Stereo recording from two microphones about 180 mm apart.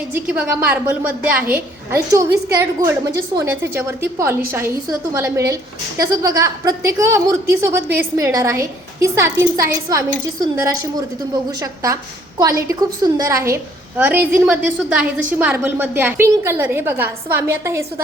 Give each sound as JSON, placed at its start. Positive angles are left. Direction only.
{"t": 0.1, "sound": "a woman's voice", "side_deg": -10}
{"t": 11.6, "sound": "a woman's voice", "side_deg": -20}